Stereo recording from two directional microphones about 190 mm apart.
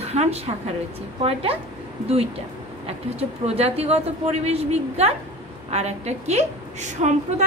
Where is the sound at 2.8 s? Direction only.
35° right (ahead or behind).